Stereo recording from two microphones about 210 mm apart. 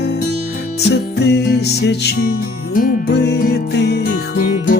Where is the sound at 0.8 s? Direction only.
55° left (ahead or behind).